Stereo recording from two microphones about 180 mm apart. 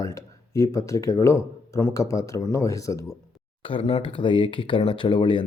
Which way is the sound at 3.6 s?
30° left (ahead or behind).